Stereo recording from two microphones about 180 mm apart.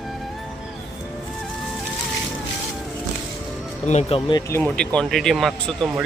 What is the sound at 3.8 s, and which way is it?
Speech, 40° left (ahead or behind).